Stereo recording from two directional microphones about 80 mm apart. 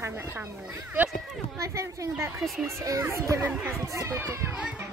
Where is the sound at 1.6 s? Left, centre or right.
Right.